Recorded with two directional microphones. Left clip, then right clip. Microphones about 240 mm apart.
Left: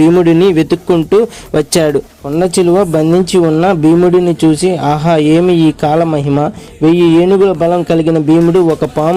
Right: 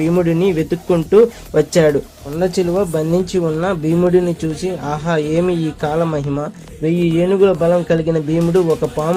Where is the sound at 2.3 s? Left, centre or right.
Left.